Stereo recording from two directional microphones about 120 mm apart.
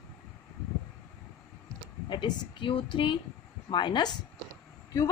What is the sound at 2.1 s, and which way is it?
A woman's voice, 40° left (ahead or behind).